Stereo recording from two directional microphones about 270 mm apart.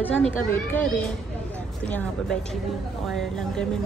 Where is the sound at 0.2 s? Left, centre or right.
Centre.